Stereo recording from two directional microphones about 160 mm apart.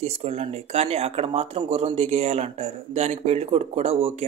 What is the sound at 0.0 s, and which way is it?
Speech, 40° right (ahead or behind).